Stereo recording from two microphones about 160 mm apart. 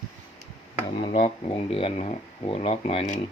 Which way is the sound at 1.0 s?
30° left (ahead or behind).